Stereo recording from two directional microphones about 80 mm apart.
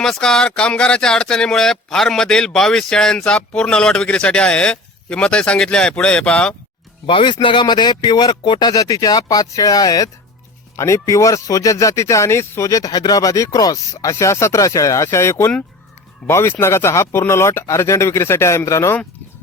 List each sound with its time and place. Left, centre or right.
0.0 s speech: centre
7.1 s speech: left
7.4 s speech: left
10.8 s speech: left